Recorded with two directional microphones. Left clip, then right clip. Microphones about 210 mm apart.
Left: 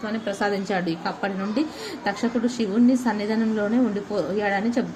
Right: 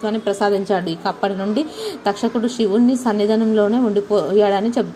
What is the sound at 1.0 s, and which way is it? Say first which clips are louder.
A woman's voice: right 7 dB; 30° right (ahead or behind).